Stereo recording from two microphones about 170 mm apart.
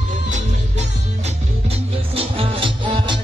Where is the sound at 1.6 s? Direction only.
35° right (ahead or behind).